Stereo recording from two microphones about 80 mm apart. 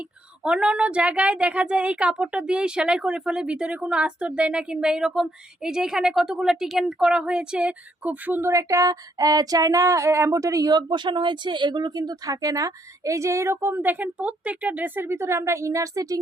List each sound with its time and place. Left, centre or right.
0.4 s speech: centre
8.5 s a sound: right
10.7 s speech: right